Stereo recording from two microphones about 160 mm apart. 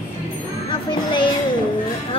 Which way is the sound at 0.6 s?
30° left (ahead or behind).